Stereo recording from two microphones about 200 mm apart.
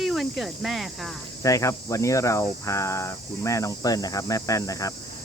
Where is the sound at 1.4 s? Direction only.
15° left (ahead or behind).